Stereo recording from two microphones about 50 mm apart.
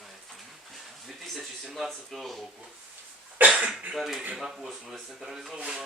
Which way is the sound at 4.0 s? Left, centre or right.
Centre.